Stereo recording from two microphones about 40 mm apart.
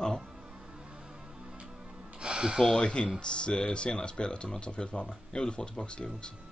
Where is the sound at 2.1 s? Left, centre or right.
Right.